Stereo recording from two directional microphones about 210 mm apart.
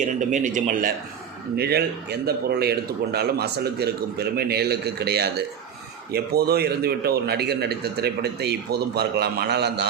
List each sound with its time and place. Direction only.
0.0 s speech: 35° right (ahead or behind); by 9.8 s 50° right (ahead or behind)